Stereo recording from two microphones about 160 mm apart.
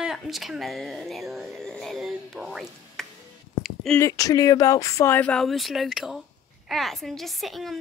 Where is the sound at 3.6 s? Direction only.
Centre (ahead or behind).